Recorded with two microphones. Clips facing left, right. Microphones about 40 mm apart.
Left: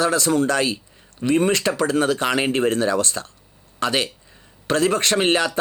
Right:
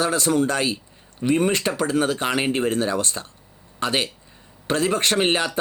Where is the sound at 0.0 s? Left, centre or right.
Right.